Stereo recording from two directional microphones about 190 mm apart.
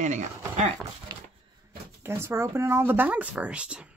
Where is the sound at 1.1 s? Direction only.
20° right (ahead or behind).